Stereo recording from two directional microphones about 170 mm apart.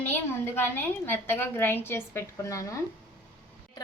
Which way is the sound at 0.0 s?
10° left (ahead or behind).